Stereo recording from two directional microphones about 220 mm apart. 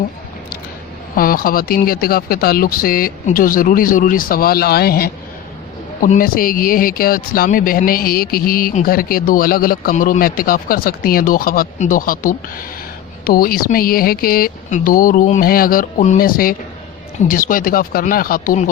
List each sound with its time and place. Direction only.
1.1 s speech: 40° left (ahead or behind)